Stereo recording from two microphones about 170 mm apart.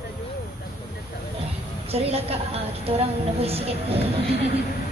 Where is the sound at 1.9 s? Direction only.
35° right (ahead or behind).